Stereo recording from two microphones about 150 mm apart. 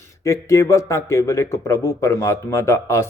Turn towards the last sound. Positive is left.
turn(degrees=20)  # may be behind; listen again after turning